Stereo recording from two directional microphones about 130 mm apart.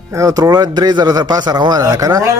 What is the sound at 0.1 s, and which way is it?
Speech, 25° right (ahead or behind).